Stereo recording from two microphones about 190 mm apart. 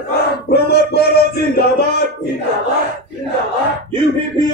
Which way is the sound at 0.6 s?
55° left (ahead or behind).